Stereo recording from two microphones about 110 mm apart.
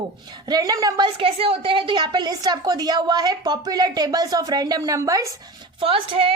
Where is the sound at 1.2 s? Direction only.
55° right (ahead or behind); by 5.3 s 30° right (ahead or behind).